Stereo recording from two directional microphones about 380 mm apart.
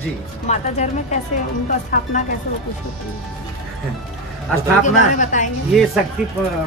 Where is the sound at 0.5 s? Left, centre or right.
Centre.